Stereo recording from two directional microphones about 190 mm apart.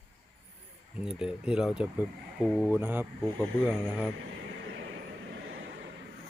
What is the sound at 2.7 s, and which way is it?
Speech, 10° right (ahead or behind).